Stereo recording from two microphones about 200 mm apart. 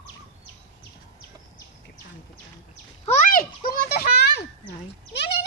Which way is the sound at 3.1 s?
40° left (ahead or behind).